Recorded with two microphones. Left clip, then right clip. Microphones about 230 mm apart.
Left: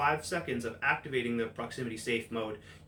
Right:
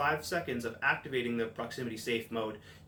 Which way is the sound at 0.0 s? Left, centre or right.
Centre.